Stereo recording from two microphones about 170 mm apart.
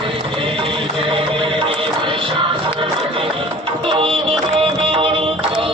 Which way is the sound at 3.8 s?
30° right (ahead or behind).